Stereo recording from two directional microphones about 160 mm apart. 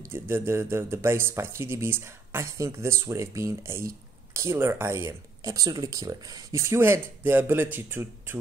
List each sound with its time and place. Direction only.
0.0 s speech: 15° right (ahead or behind)